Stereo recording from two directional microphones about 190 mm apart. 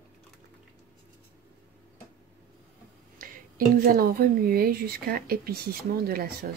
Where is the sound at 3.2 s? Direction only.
50° right (ahead or behind).